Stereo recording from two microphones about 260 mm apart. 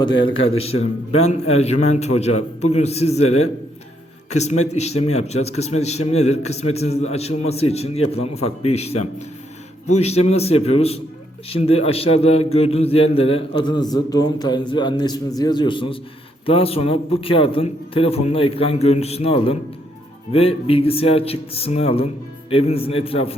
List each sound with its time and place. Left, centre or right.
0.0 s a man's voice: centre
4.3 s a man's voice: left